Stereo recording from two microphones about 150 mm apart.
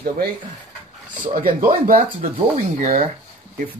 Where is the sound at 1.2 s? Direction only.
65° right (ahead or behind).